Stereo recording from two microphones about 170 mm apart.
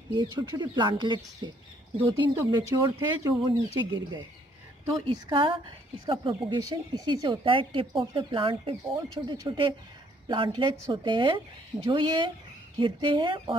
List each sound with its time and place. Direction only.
0.1 s speech: 25° right (ahead or behind)
2.7 s a woman's voice: 20° right (ahead or behind)